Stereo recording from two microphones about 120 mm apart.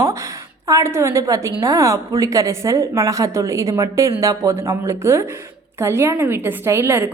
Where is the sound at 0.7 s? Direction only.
25° right (ahead or behind).